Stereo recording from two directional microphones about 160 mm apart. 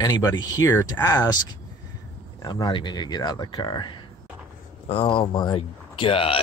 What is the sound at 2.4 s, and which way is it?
Speech, 25° left (ahead or behind).